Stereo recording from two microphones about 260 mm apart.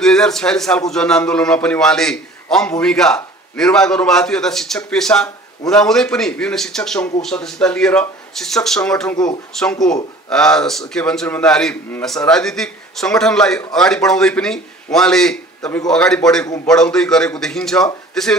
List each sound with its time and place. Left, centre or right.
0.0 s a man's voice: centre
9.1 s speech: centre
9.6 s a man's voice: centre